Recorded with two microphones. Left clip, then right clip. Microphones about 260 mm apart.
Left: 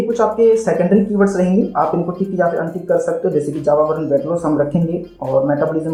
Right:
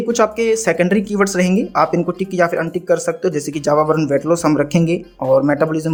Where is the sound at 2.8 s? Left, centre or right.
Right.